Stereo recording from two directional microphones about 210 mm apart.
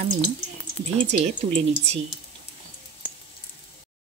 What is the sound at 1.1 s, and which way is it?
Speech, 35° right (ahead or behind).